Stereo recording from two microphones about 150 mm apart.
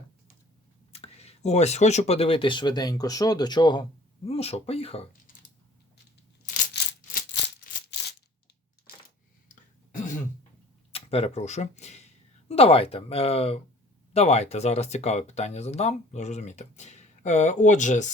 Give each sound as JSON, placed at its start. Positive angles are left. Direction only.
{"t": 0.9, "sound": "speech", "side_deg": 45}
{"t": 4.3, "sound": "speech", "side_deg": 45}
{"t": 9.9, "sound": "throat clearing", "side_deg": 60}
{"t": 10.9, "sound": "speech", "side_deg": 40}